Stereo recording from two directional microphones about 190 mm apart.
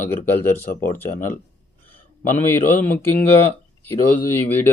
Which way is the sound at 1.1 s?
40° left (ahead or behind).